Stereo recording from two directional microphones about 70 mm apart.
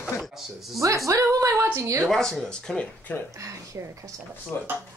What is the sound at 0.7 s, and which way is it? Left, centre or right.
Speech, right.